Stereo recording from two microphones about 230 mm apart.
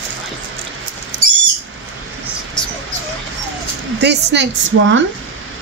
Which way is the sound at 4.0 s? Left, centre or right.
Right.